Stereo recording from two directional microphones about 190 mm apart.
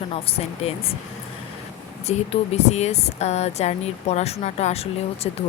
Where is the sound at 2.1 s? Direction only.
35° left (ahead or behind).